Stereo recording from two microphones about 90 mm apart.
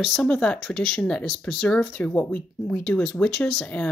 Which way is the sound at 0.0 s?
5° left (ahead or behind).